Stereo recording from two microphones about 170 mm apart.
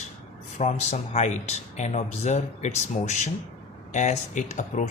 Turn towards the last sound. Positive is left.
turn(degrees=45)  # may be behind; listen again after turning